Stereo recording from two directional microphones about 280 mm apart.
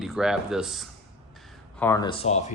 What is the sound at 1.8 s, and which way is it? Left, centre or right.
Speech, centre.